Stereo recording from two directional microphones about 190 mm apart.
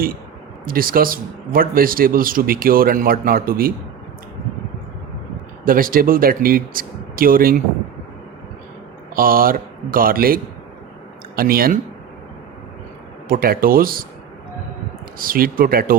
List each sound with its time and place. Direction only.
0.6 s speech: 50° right (ahead or behind)
5.6 s speech: 50° right (ahead or behind)
9.1 s speech: 50° right (ahead or behind)
13.2 s speech: 50° right (ahead or behind)
15.2 s speech: 50° right (ahead or behind)